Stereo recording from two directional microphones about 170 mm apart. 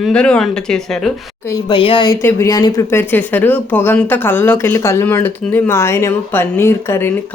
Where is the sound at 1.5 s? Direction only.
20° left (ahead or behind).